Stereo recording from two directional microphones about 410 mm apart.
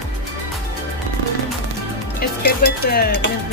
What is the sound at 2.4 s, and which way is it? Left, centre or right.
Dishes, left.